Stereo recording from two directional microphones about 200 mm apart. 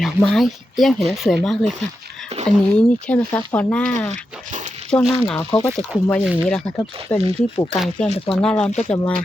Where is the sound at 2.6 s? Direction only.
5° left (ahead or behind).